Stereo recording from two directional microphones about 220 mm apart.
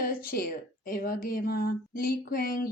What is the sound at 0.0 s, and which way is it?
Speech, 40° left (ahead or behind).